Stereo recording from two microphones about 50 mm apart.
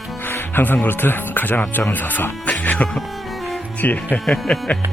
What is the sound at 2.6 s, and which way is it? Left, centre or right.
Music, left.